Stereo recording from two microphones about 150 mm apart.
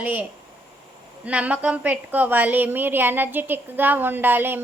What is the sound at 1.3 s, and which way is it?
A woman's voice, 10° right (ahead or behind).